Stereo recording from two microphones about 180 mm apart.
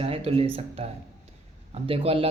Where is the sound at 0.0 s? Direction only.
30° right (ahead or behind).